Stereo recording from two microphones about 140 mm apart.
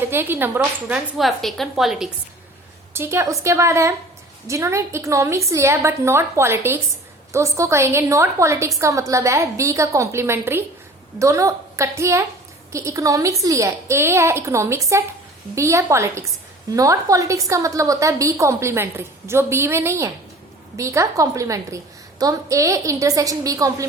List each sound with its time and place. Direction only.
0.1 s speech: 15° right (ahead or behind)
1.1 s a woman's voice: centre (ahead or behind)
2.9 s a woman's voice: 20° right (ahead or behind)